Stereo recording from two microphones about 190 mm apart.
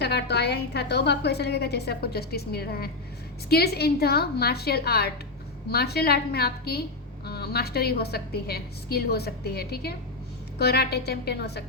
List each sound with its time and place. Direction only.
0.0 s a woman's voice: 60° left (ahead or behind)